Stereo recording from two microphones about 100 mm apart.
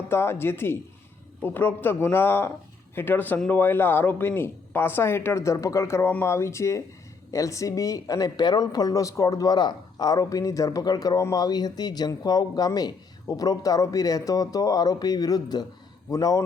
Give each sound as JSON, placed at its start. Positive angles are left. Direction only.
{"t": 0.1, "sound": "speech", "side_deg": 25}